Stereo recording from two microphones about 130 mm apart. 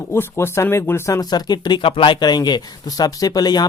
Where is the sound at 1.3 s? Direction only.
35° left (ahead or behind).